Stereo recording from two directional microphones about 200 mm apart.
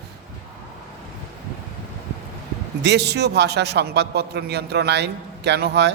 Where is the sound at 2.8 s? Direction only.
55° right (ahead or behind).